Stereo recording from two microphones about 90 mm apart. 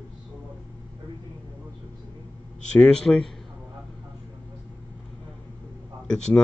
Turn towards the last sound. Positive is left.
turn(degrees=10)  # may be behind; listen again after turning